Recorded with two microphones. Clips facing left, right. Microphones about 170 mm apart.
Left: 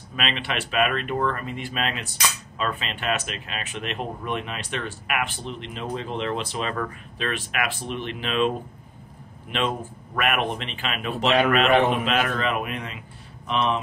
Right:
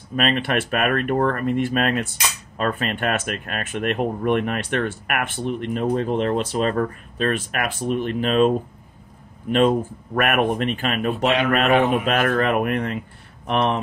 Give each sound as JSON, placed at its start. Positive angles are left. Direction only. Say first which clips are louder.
{"t": 0.1, "sound": "speech", "louder": "right 7 dB", "side_deg": -50}